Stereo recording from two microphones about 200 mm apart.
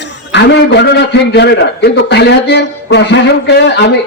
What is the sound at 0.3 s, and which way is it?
A man's voice, 60° left (ahead or behind).